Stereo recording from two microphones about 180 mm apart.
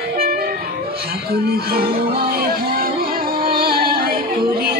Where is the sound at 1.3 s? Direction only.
55° right (ahead or behind).